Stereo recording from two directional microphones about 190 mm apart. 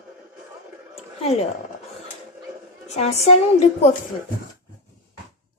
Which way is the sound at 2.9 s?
35° left (ahead or behind).